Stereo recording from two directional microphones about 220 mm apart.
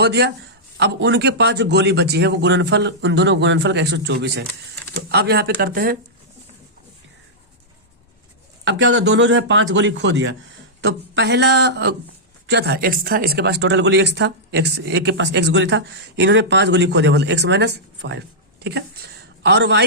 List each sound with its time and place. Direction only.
0.0 s speech: 50° right (ahead or behind)
8.6 s speech: 55° right (ahead or behind)
19.4 s a man's voice: 50° right (ahead or behind)